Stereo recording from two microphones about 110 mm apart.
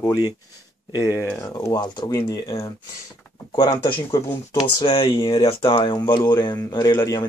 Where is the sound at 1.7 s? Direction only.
40° left (ahead or behind).